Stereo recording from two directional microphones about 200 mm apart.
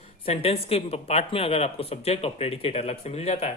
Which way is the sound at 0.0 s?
30° left (ahead or behind).